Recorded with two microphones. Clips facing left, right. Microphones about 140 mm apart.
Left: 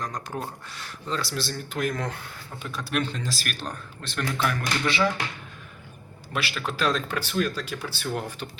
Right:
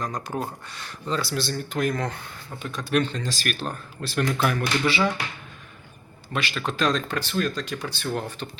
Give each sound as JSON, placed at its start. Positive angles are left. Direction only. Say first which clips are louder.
{"t": 0.0, "sound": "speech", "louder": "right 3 dB", "side_deg": 0}
{"t": 6.3, "sound": "speech", "louder": "right 2 dB", "side_deg": 5}